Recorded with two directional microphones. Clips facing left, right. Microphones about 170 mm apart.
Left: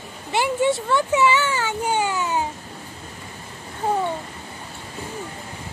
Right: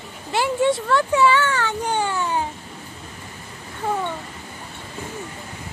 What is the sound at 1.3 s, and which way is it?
Speech, 5° left (ahead or behind).